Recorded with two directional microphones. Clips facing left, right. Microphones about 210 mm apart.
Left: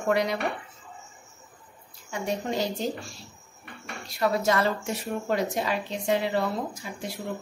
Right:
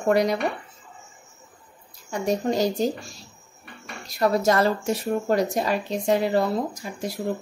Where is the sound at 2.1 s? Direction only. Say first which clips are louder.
Right 5 dB; 40° right (ahead or behind).